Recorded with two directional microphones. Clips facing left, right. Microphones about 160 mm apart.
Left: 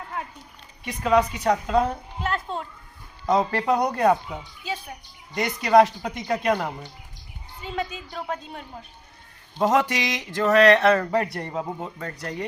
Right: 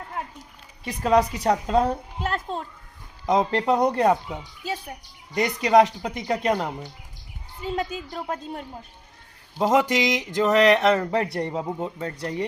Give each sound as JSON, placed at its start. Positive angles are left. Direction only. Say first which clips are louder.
{"t": 0.9, "sound": "a woman's voice", "louder": "right 1 dB", "side_deg": -35}
{"t": 3.2, "sound": "speech", "louder": "right 1 dB", "side_deg": -20}
{"t": 5.3, "sound": "speech", "louder": "even", "side_deg": -20}
{"t": 7.6, "sound": "a woman's voice", "louder": "right 3 dB", "side_deg": -40}
{"t": 9.6, "sound": "speech", "louder": "right 1 dB", "side_deg": -10}